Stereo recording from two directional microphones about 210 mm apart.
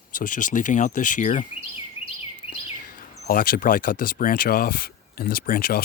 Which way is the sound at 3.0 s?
45° left (ahead or behind).